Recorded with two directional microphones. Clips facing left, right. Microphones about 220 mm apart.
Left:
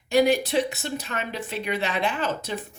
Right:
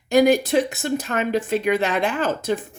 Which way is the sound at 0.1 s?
45° right (ahead or behind).